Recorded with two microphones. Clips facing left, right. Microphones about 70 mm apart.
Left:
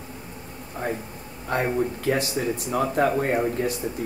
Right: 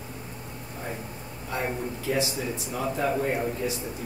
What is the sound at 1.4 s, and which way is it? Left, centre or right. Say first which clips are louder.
Speech: left 6 dB; left.